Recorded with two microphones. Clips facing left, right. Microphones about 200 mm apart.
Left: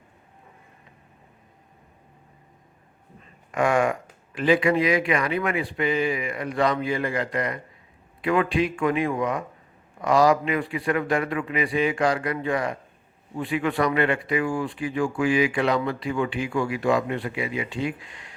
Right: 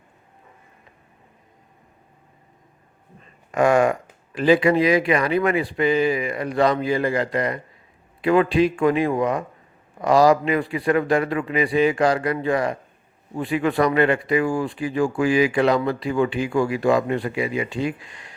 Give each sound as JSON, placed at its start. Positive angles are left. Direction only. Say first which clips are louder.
{"t": 3.5, "sound": "speech", "louder": "right 4 dB", "side_deg": -35}